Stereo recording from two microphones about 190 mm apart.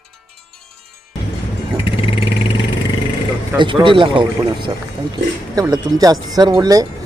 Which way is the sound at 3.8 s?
25° right (ahead or behind).